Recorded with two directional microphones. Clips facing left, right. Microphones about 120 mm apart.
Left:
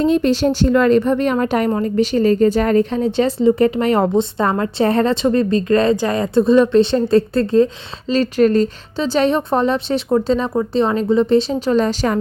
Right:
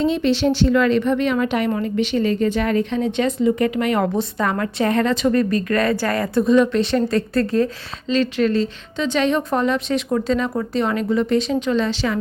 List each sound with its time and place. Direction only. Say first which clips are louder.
0.0 s a woman's voice: left 3 dB; 45° left (ahead or behind); by 7.7 s 25° left (ahead or behind)
8.1 s a woman's voice: left 4 dB; 40° left (ahead or behind)